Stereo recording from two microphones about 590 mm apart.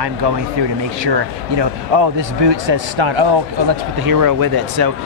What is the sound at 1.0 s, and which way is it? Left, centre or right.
Speech, right.